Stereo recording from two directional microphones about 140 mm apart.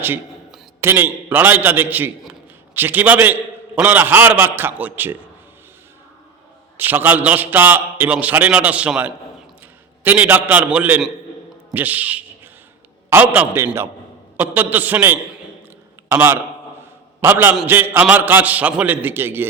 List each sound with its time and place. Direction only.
0.8 s a man's voice: 15° right (ahead or behind)
6.7 s a man's voice: 15° right (ahead or behind)